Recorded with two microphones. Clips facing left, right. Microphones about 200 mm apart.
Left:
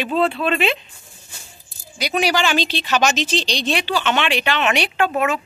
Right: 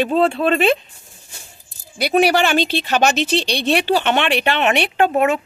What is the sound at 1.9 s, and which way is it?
Speech, 55° right (ahead or behind).